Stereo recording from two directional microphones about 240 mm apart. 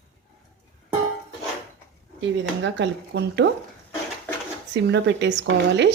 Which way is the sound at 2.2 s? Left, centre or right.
Right.